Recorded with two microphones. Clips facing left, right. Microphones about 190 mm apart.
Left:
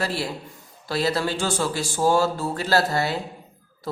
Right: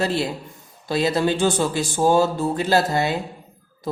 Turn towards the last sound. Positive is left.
turn(degrees=-15)  # may be behind; listen again after turning